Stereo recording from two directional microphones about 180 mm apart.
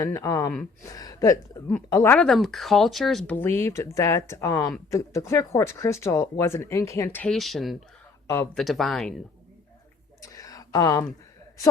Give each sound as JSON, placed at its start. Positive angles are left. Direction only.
{"t": 0.0, "sound": "speech", "side_deg": 20}
{"t": 2.1, "sound": "speech", "side_deg": 0}
{"t": 10.2, "sound": "a sound", "side_deg": 20}